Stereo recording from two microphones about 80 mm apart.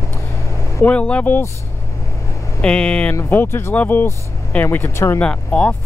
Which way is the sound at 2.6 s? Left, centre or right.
Centre.